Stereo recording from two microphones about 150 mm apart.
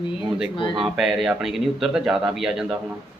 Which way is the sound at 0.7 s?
Centre (ahead or behind).